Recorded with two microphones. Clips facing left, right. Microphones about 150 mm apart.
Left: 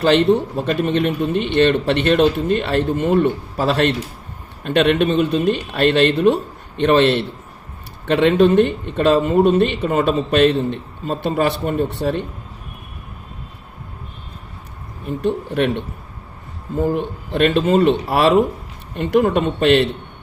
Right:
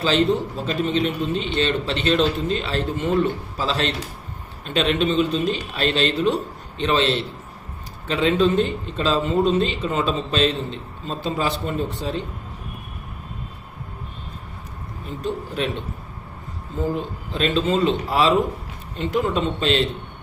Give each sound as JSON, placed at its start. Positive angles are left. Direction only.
{"t": 0.0, "sound": "a man's voice", "side_deg": 65}
{"t": 15.0, "sound": "a man's voice", "side_deg": 65}
{"t": 16.9, "sound": "a man's voice", "side_deg": 60}